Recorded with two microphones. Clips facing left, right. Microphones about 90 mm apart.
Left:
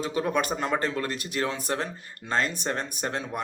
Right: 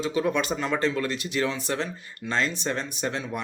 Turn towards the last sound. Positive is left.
turn(degrees=45)  # may be behind; listen again after turning